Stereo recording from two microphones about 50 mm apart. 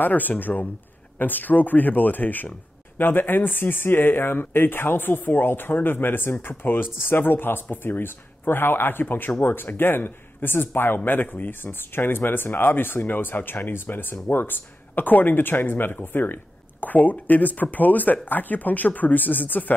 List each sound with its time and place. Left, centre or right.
0.0 s speech: left
11.7 s speech: left
16.8 s speech: left